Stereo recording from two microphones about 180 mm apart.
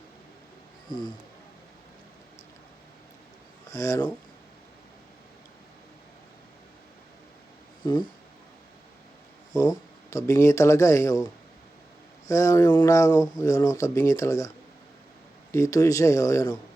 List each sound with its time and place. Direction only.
3.7 s speech: 20° left (ahead or behind)
7.8 s speech: 25° left (ahead or behind)
9.5 s speech: 20° left (ahead or behind)
12.3 s speech: 20° left (ahead or behind)
15.5 s speech: 15° left (ahead or behind)